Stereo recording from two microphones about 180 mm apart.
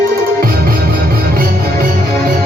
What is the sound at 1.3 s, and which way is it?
Music, 55° right (ahead or behind).